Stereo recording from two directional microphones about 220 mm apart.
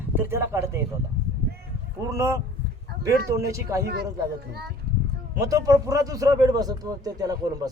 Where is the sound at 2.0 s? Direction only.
10° right (ahead or behind).